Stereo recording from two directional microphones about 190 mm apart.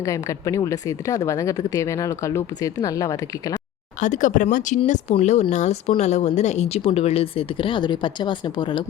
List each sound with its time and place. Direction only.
0.0 s a woman's voice: 15° left (ahead or behind)
4.0 s speech: 40° left (ahead or behind); by 8.8 s 25° left (ahead or behind)